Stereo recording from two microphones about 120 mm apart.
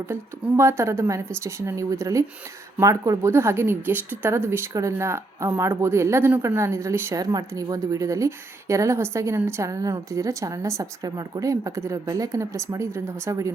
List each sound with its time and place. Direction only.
0.1 s speech: 20° right (ahead or behind)